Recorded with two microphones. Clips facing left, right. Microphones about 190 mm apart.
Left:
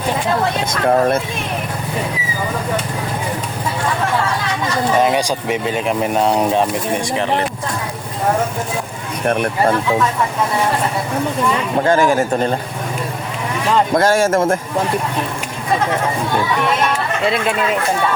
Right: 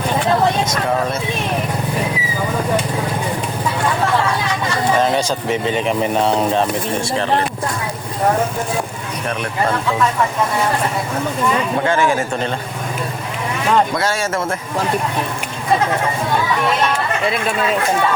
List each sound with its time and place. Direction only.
0.7 s speech: 55° left (ahead or behind)
4.9 s speech: 15° left (ahead or behind)
9.2 s speech: 55° left (ahead or behind)
11.9 s a man's voice: 40° left (ahead or behind)
13.9 s speech: 50° left (ahead or behind)